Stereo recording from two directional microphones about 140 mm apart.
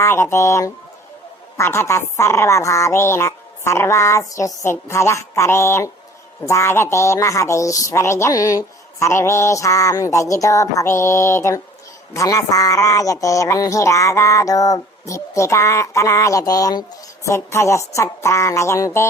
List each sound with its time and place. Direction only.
0.0 s a woman's voice: 20° left (ahead or behind)